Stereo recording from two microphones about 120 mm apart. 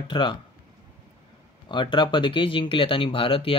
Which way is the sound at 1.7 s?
40° left (ahead or behind).